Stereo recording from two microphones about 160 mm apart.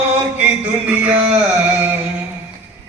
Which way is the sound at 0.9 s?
10° right (ahead or behind).